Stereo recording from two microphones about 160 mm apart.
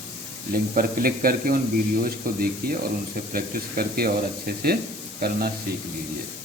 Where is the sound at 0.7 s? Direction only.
65° right (ahead or behind).